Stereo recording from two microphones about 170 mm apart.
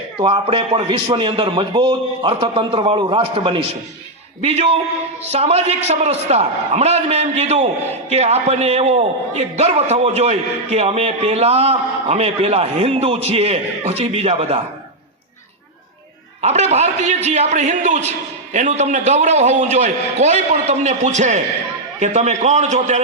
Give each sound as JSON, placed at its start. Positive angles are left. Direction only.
{"t": 0.2, "sound": "a man's voice", "side_deg": -35}
{"t": 16.4, "sound": "a man's voice", "side_deg": -40}